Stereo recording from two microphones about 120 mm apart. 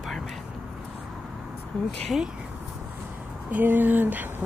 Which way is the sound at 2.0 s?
5° right (ahead or behind).